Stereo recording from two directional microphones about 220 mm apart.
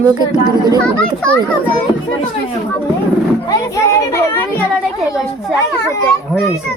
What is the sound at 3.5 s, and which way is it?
A child's voice, 15° left (ahead or behind).